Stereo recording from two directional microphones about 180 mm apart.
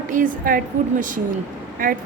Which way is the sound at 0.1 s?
50° right (ahead or behind).